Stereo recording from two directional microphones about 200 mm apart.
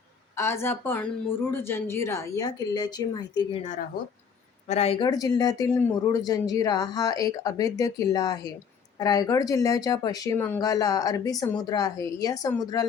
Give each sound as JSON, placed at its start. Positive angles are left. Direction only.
{"t": 0.3, "sound": "speech", "side_deg": 15}
{"t": 3.6, "sound": "speech", "side_deg": 35}